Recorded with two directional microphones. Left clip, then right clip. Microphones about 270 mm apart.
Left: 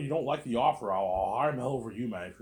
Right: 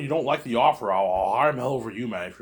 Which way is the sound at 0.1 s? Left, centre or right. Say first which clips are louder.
Right 7 dB; centre.